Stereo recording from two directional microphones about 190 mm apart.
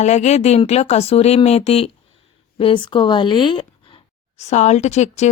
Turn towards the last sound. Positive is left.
turn(degrees=35)  # may be behind; listen again after turning